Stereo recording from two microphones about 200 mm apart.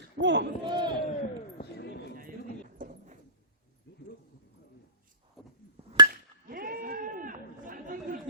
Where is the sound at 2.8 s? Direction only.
40° right (ahead or behind).